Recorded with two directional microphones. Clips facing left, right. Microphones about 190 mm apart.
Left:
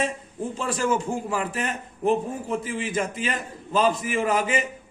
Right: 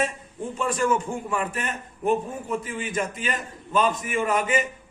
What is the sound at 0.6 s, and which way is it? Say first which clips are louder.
A man's voice: right 1 dB; 30° left (ahead or behind).